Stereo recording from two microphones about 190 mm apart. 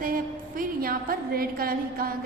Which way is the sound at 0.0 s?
45° right (ahead or behind).